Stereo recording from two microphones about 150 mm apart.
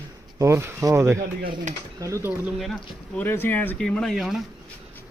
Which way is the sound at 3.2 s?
15° left (ahead or behind).